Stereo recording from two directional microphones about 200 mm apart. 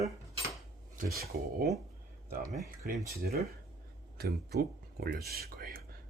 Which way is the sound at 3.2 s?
50° right (ahead or behind).